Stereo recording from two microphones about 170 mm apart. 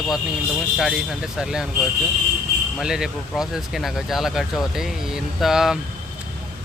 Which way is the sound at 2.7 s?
5° right (ahead or behind).